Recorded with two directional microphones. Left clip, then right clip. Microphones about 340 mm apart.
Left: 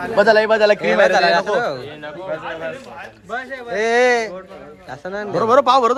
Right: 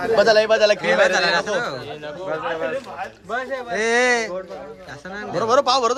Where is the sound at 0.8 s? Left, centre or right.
Centre.